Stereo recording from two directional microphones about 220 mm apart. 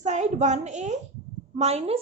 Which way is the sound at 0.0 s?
30° right (ahead or behind).